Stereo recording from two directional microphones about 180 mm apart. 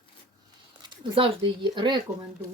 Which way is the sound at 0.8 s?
25° right (ahead or behind).